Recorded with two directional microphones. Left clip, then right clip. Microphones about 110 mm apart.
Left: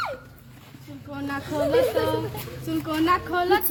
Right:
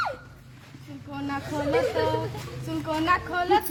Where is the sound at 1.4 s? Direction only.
Centre (ahead or behind).